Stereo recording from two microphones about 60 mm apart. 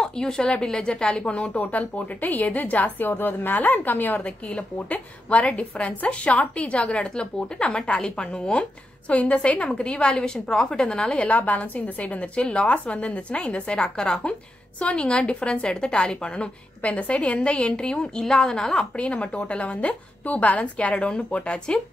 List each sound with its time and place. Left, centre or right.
0.0 s a woman's voice: centre
11.2 s a woman's voice: left; by 18.9 s centre
18.9 s a woman's voice: left